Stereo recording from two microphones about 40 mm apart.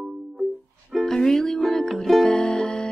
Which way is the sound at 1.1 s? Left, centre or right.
Centre.